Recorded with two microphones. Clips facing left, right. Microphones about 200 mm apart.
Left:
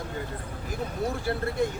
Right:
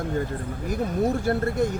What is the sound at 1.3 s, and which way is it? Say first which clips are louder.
Speech: right 5 dB; 50° right (ahead or behind).